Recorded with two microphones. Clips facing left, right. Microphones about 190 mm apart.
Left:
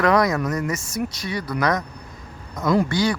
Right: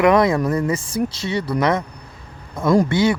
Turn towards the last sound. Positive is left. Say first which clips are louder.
# right 4 dB
turn(degrees=-25)  # may be behind; listen again after turning